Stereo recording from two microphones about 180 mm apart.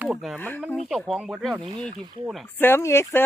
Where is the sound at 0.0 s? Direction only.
Centre (ahead or behind).